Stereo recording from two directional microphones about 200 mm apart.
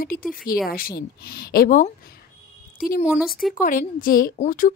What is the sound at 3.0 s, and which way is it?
Speech, 5° right (ahead or behind).